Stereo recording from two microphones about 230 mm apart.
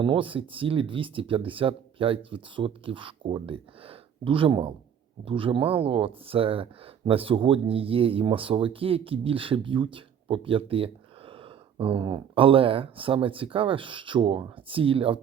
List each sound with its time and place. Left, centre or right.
0.0 s speech: right